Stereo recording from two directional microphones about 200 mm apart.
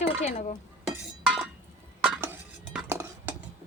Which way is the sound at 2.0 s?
5° right (ahead or behind).